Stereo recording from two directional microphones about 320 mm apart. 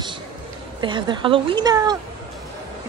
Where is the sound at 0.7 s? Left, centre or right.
Centre.